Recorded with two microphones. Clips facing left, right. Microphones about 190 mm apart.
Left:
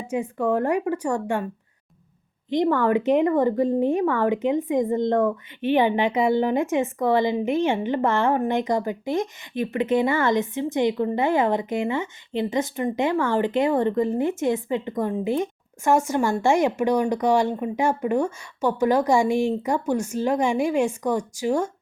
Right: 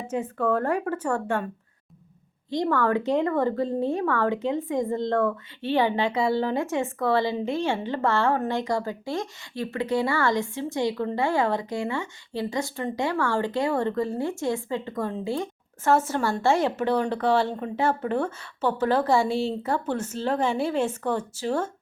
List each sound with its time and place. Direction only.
0.1 s speech: 15° left (ahead or behind)
2.5 s speech: 20° left (ahead or behind)